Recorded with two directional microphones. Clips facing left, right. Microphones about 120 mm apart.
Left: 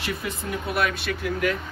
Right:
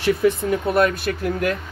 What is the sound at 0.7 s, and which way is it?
Speech, 40° right (ahead or behind).